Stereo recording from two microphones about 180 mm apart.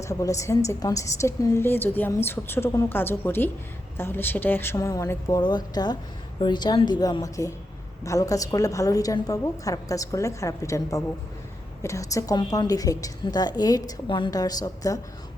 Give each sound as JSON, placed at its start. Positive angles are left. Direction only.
{"t": 0.0, "sound": "a woman's voice", "side_deg": 15}